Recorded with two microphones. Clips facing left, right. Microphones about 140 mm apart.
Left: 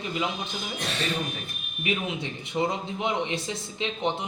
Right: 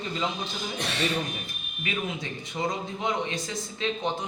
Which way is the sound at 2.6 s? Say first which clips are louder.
Left 3 dB; 25° left (ahead or behind).